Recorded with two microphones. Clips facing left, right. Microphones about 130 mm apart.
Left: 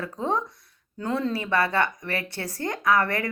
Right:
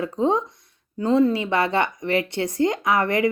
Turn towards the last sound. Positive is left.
turn(degrees=-20)  # may be behind; listen again after turning